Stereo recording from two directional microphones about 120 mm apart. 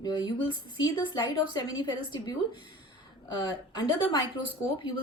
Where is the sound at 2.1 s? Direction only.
40° left (ahead or behind).